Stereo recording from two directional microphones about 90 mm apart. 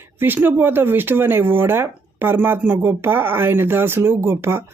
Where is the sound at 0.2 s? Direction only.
20° right (ahead or behind).